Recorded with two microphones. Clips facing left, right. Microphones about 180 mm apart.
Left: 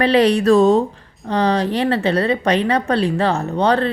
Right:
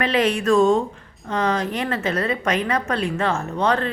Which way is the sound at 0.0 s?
35° left (ahead or behind).